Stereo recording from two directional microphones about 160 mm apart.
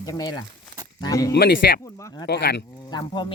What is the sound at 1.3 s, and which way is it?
Speech, 90° left.